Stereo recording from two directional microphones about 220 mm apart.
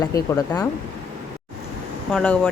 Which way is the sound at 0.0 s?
15° left (ahead or behind).